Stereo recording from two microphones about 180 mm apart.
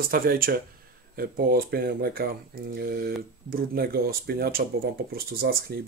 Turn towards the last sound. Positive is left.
turn(degrees=-60)  # may be behind; listen again after turning